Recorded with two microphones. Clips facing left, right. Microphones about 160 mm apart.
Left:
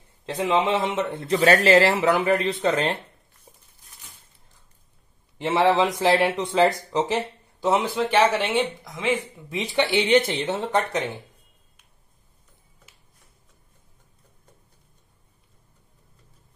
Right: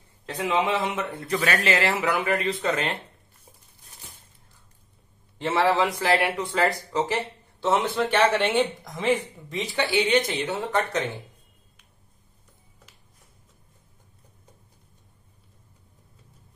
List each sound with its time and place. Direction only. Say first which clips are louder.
0.4 s speech: left 2 dB; 25° left (ahead or behind)
5.4 s speech: left 2 dB; 20° left (ahead or behind)
7.6 s speech: left 1 dB; 10° left (ahead or behind)
9.8 s speech: left 3 dB; 25° left (ahead or behind)